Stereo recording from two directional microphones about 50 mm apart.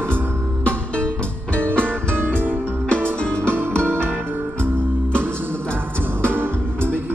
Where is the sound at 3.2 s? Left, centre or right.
Left.